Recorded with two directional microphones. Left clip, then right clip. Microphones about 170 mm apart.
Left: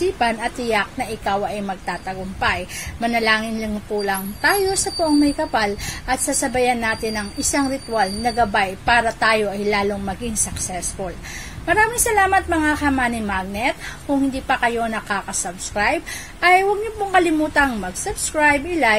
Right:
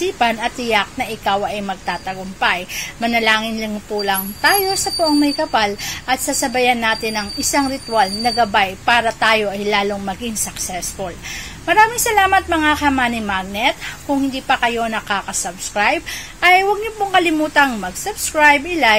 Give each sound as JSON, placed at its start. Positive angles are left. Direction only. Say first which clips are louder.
{"t": 0.0, "sound": "a woman's voice", "louder": "right 2 dB", "side_deg": -5}